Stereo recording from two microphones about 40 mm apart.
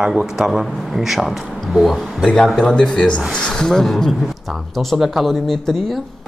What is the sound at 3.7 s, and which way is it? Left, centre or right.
Speech, centre.